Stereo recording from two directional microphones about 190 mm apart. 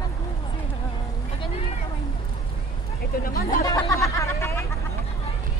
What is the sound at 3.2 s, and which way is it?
Chatter, 50° left (ahead or behind).